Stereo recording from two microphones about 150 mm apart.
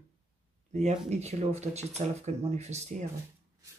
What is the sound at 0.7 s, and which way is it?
Speech, 45° right (ahead or behind).